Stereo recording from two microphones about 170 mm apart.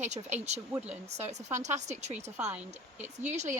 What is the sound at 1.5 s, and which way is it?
Speech, 45° right (ahead or behind).